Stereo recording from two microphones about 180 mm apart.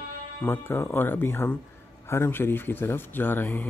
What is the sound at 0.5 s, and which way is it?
Speech, 10° left (ahead or behind).